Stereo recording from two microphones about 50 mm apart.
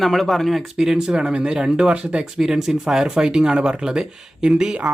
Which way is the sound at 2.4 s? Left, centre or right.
Centre.